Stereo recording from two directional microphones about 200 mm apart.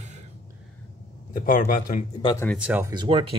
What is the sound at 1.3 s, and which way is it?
Speech, 45° left (ahead or behind).